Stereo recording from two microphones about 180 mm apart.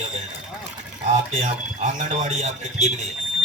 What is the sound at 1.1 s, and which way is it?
Speech, 40° right (ahead or behind).